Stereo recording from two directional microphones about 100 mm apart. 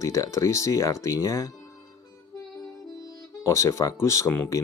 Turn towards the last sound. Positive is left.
turn(degrees=25)  # may be behind; listen again after turning